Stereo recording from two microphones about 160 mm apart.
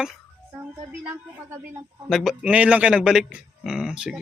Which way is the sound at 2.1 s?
Centre (ahead or behind).